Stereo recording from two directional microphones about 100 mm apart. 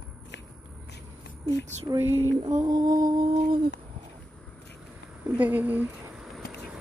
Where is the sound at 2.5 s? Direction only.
40° right (ahead or behind).